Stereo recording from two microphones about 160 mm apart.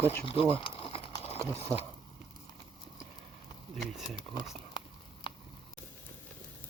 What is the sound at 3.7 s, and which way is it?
Speech, centre (ahead or behind).